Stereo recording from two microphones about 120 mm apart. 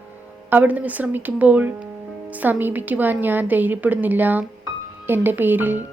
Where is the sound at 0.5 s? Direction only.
15° right (ahead or behind).